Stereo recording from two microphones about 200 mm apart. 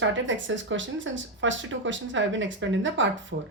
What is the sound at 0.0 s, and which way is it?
Speech, 70° right (ahead or behind).